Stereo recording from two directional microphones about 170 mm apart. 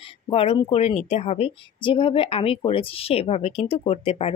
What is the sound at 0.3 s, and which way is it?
A woman's voice, 35° left (ahead or behind).